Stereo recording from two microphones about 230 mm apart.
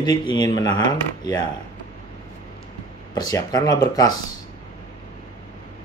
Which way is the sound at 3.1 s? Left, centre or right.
Centre.